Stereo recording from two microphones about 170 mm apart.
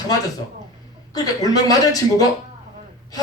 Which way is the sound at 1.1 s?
20° left (ahead or behind).